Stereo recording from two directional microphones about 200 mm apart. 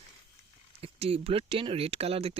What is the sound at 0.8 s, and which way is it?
Speech, 30° right (ahead or behind).